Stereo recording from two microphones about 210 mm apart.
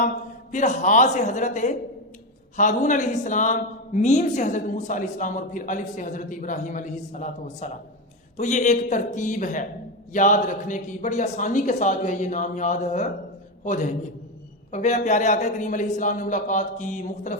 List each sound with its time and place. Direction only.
0.5 s a man's voice: 35° left (ahead or behind)